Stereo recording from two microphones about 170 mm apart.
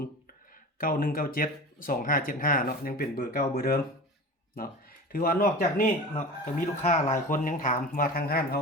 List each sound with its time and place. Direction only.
0.8 s speech: 60° left (ahead or behind)